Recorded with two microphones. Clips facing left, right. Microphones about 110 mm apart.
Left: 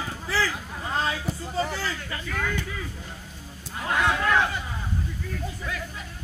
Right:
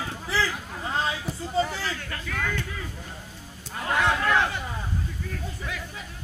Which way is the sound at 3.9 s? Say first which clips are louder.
Even; centre (ahead or behind).